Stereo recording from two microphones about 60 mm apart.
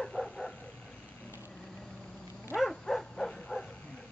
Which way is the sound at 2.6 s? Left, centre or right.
Centre.